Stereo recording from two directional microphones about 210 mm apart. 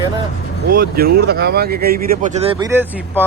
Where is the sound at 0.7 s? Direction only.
45° right (ahead or behind); by 2.6 s 25° right (ahead or behind).